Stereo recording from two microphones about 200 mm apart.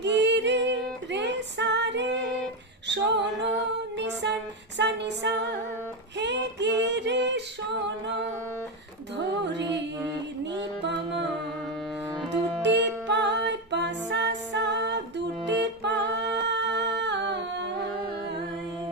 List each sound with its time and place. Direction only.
0.0 s music: 60° right (ahead or behind)
6.1 s female singing: 60° right (ahead or behind)
9.1 s music: 60° right (ahead or behind)
10.8 s music: 60° right (ahead or behind)
12.6 s music: 60° right (ahead or behind)